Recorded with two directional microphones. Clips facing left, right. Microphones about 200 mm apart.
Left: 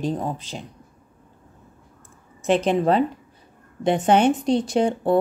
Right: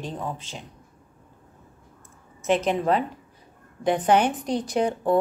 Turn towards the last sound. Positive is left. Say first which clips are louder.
# left 3 dB
turn(degrees=30)  # may be behind; listen again after turning